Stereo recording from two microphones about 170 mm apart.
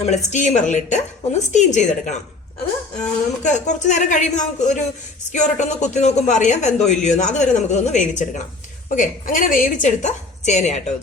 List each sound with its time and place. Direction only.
0.0 s speech: 40° left (ahead or behind)
3.4 s speech: 45° left (ahead or behind)